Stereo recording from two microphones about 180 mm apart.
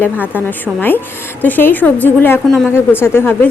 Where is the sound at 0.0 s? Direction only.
10° left (ahead or behind).